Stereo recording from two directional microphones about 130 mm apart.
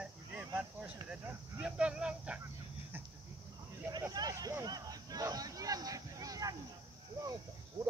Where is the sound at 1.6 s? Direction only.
5° right (ahead or behind).